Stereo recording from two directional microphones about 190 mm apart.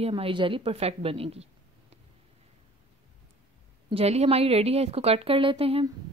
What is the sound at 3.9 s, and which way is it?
A woman's voice, 30° right (ahead or behind).